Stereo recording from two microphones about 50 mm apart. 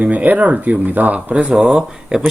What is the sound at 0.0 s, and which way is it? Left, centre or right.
Speech, right.